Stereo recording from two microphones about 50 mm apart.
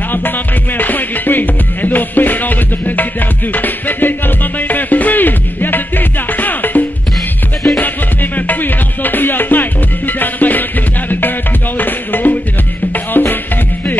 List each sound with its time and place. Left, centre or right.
0.7 s music: left
7.8 s music: left